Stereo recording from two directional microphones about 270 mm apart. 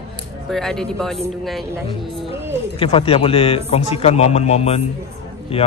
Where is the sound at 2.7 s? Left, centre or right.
Left.